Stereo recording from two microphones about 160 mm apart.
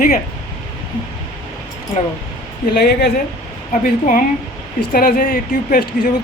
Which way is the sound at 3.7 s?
55° left (ahead or behind).